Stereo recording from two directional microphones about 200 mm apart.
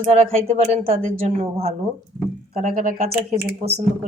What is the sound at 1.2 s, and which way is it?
Speech, 30° right (ahead or behind).